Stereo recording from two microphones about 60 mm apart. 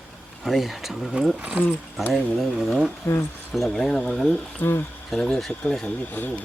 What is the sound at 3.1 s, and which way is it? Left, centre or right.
Speech, left.